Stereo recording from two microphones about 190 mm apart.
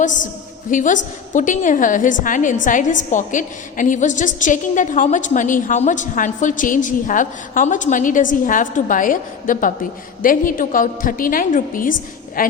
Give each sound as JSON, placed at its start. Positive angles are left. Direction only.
{"t": 0.7, "sound": "a woman's voice", "side_deg": 40}